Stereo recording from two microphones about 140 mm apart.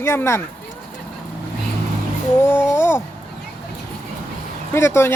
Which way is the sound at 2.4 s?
15° left (ahead or behind).